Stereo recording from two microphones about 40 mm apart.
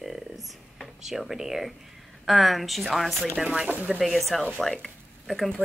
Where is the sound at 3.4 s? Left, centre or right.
Centre.